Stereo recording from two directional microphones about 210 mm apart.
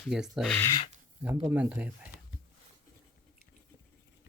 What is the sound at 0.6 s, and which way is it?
Speech, 15° left (ahead or behind).